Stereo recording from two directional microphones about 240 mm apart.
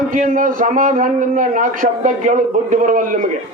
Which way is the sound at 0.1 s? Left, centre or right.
Right.